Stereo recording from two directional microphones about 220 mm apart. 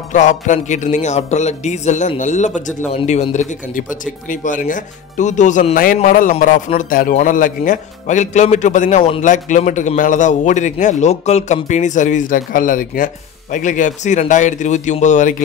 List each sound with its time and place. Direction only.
0.1 s speech: 35° left (ahead or behind)